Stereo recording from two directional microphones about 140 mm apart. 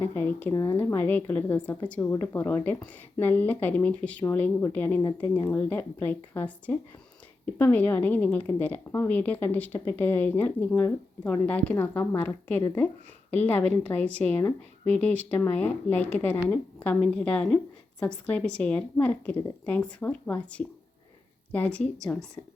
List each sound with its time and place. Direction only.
0.0 s a woman's voice: 15° left (ahead or behind)